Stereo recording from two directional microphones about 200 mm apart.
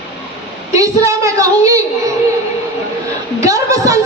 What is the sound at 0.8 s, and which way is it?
A woman's voice, 15° right (ahead or behind).